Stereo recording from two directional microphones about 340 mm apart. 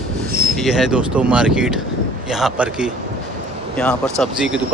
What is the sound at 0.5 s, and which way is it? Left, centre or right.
Speech, centre.